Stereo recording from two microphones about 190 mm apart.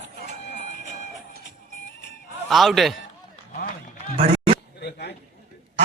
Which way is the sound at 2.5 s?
Centre (ahead or behind).